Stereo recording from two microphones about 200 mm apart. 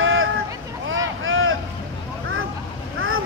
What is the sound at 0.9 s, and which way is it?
Boat, 75° right (ahead or behind).